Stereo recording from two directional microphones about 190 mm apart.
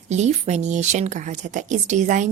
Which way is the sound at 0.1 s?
35° right (ahead or behind).